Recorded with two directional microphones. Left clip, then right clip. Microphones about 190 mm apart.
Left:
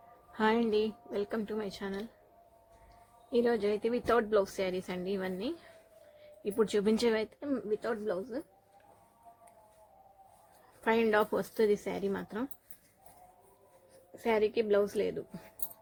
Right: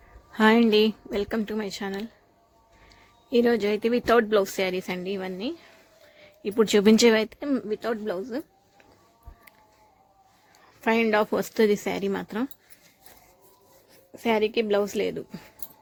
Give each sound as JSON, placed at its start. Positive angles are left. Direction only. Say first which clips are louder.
{"t": 0.3, "sound": "speech", "louder": "right 9 dB", "side_deg": -35}
{"t": 3.2, "sound": "speech", "louder": "right 7 dB", "side_deg": -35}
{"t": 6.1, "sound": "speech", "louder": "right 7 dB", "side_deg": -35}
{"t": 10.8, "sound": "speech", "louder": "right 6 dB", "side_deg": -30}
{"t": 14.3, "sound": "speech", "louder": "right 5 dB", "side_deg": -35}